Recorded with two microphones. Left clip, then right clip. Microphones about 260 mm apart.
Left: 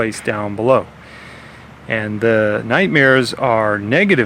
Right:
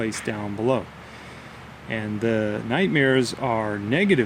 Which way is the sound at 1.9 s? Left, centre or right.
Left.